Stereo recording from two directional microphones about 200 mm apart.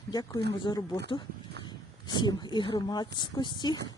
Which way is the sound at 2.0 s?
20° left (ahead or behind).